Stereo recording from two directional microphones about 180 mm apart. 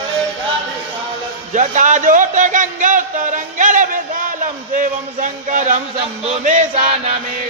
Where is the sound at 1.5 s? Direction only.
45° right (ahead or behind).